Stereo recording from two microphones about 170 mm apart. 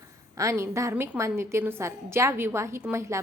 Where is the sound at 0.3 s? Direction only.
15° right (ahead or behind).